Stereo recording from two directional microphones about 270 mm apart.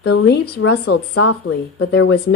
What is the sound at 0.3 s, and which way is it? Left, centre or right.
Speech, left.